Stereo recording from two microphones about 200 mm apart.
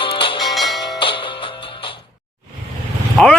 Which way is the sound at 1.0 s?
25° left (ahead or behind).